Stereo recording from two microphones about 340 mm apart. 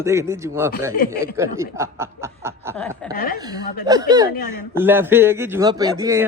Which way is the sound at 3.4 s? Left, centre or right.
Centre.